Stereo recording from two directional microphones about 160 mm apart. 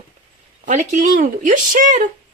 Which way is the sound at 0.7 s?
50° right (ahead or behind).